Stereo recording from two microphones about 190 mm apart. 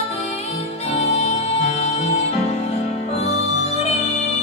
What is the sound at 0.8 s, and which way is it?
Music, 35° left (ahead or behind).